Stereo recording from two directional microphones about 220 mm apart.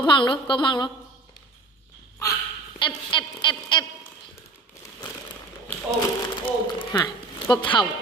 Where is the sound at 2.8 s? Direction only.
20° left (ahead or behind).